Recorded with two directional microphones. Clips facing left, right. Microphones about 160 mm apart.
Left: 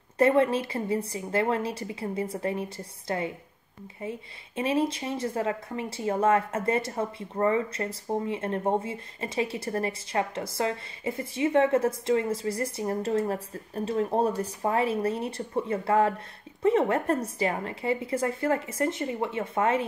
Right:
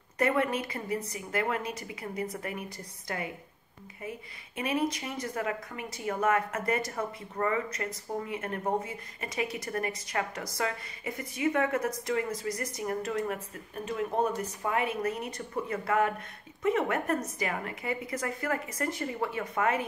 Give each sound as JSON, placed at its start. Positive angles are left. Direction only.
{"t": 0.2, "sound": "a woman's voice", "side_deg": 30}